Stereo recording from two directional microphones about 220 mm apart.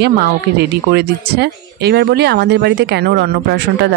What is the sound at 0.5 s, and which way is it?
Speech, 45° right (ahead or behind).